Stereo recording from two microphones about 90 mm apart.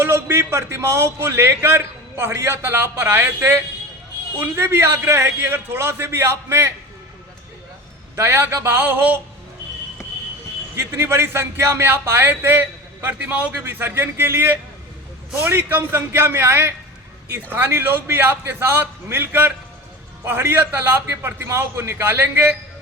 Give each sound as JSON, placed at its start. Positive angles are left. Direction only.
{"t": 0.0, "sound": "a man's voice", "side_deg": -25}
{"t": 8.1, "sound": "a man's voice", "side_deg": -25}
{"t": 10.8, "sound": "a man's voice", "side_deg": -30}